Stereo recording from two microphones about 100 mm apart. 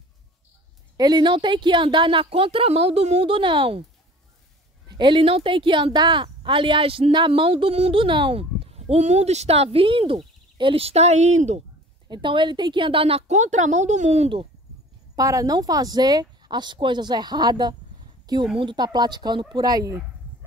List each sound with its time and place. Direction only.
0.9 s a woman's voice: 45° right (ahead or behind)
4.8 s a woman's voice: 50° right (ahead or behind); by 11.6 s 90° right
12.1 s a woman's voice: 55° right (ahead or behind)
14.1 s a woman's voice: 80° right
15.1 s speech: 35° right (ahead or behind)
18.2 s a sound: 45° right (ahead or behind)
18.6 s speech: 50° right (ahead or behind)